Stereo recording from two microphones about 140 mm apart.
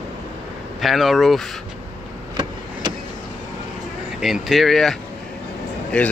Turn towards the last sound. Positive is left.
turn(degrees=10)  # may be behind; listen again after turning